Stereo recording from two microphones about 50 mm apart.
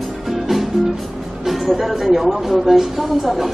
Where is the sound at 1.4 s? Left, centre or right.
Centre.